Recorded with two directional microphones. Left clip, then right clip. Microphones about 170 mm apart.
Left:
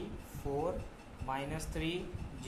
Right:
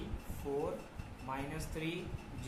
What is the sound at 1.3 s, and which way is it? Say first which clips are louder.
Speech: left 3 dB; 50° left (ahead or behind).